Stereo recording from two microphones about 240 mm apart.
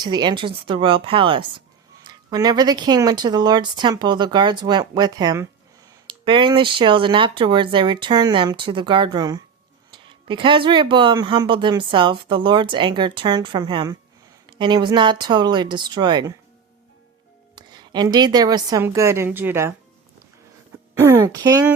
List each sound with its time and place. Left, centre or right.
0.0 s speech: centre
17.5 s a woman's voice: centre
21.0 s speech: centre